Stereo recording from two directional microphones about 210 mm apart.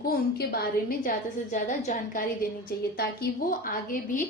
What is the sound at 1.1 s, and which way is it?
A woman's voice, 35° left (ahead or behind).